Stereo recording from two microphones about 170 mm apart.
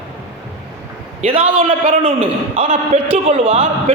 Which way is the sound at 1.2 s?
35° right (ahead or behind).